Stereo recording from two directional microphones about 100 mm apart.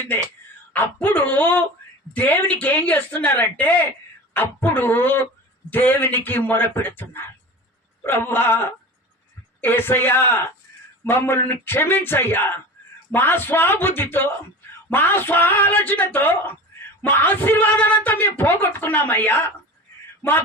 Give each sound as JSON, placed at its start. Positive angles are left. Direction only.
{"t": 0.7, "sound": "a man's voice", "side_deg": 15}